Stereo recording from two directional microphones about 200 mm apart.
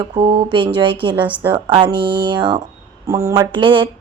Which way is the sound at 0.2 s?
30° right (ahead or behind).